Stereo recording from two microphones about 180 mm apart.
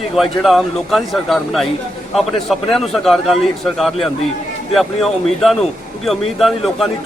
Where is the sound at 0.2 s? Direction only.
Centre (ahead or behind).